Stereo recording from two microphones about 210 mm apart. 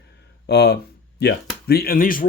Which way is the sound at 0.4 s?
50° left (ahead or behind).